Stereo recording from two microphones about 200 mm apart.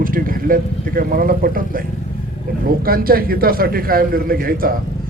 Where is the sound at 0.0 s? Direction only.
45° right (ahead or behind).